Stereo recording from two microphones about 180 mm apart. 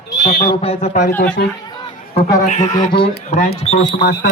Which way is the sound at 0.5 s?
35° left (ahead or behind).